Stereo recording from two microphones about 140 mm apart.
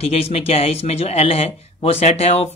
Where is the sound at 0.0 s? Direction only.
45° left (ahead or behind).